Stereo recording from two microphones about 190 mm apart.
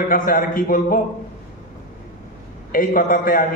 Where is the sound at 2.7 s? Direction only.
45° left (ahead or behind).